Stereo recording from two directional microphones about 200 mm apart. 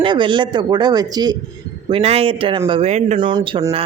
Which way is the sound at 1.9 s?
30° right (ahead or behind).